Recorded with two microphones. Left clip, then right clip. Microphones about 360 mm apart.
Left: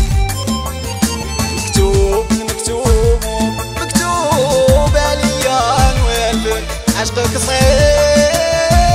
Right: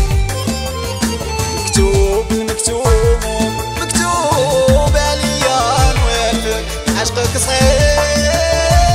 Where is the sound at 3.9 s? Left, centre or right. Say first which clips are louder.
Even; centre.